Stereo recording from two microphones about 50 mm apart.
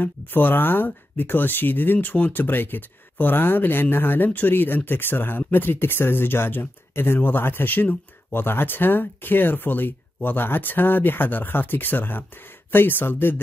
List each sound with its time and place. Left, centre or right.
0.0 s speech: left